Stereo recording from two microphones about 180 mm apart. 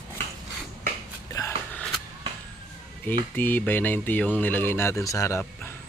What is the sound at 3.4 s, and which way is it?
Speech, 10° left (ahead or behind).